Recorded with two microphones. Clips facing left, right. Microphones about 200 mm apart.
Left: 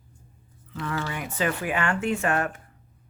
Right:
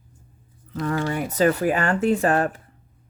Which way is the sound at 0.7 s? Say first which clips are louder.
Right 7 dB; 40° right (ahead or behind).